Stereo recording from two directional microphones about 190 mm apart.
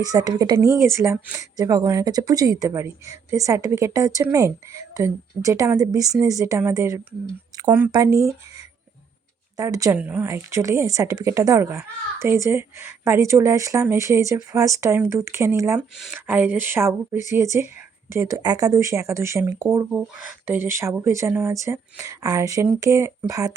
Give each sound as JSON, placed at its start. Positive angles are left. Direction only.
{"t": 0.0, "sound": "a woman's voice", "side_deg": -20}
{"t": 8.2, "sound": "a woman's voice", "side_deg": -15}